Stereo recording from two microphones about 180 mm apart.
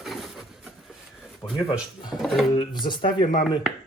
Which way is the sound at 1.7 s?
25° left (ahead or behind).